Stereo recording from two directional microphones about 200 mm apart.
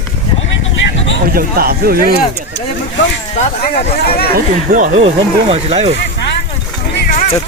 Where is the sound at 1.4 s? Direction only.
50° right (ahead or behind).